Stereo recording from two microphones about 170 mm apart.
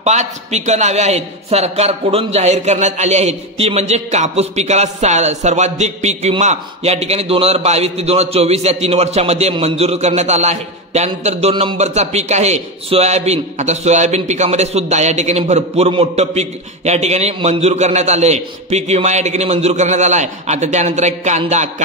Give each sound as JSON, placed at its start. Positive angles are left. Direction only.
{"t": 0.0, "sound": "a man's voice", "side_deg": -40}